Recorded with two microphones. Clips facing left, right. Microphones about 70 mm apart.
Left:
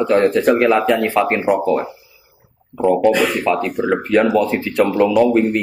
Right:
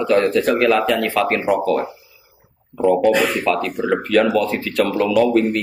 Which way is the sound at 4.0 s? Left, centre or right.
Centre.